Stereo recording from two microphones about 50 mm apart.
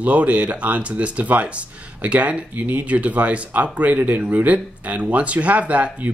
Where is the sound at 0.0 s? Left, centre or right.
Right.